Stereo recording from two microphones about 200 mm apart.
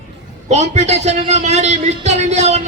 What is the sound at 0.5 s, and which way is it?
A man's voice, 35° right (ahead or behind).